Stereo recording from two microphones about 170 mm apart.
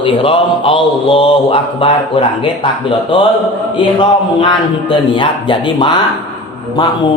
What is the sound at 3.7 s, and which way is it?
A man's voice, 30° left (ahead or behind).